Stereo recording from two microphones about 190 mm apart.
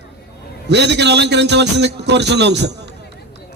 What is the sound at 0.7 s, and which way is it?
A man's voice, 65° right (ahead or behind).